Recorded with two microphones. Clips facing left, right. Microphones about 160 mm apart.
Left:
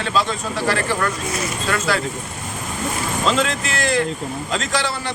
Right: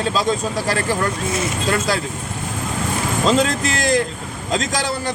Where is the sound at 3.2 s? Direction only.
40° right (ahead or behind).